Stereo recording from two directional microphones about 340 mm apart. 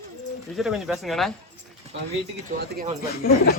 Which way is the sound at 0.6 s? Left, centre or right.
Centre.